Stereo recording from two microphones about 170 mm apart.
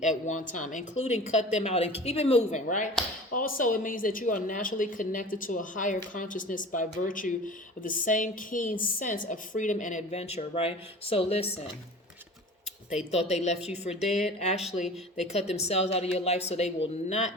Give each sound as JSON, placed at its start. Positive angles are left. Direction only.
{"t": 0.0, "sound": "speech", "side_deg": 45}
{"t": 13.1, "sound": "speech", "side_deg": 40}